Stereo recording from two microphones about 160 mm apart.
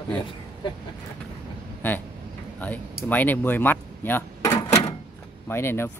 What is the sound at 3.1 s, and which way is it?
Speech, 10° left (ahead or behind).